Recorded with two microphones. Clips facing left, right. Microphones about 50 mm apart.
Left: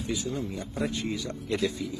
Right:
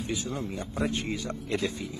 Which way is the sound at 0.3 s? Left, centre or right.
Right.